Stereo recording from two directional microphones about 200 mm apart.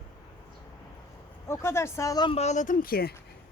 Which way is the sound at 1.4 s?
15° left (ahead or behind).